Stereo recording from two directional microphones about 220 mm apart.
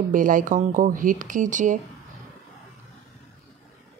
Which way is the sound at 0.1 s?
35° right (ahead or behind).